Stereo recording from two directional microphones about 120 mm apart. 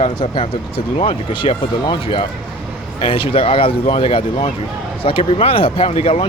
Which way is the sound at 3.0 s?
50° left (ahead or behind).